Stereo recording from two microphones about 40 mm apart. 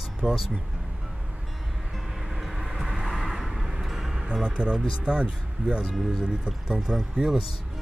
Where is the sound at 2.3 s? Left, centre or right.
Centre.